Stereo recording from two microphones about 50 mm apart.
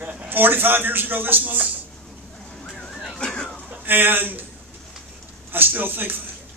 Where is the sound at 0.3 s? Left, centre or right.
Right.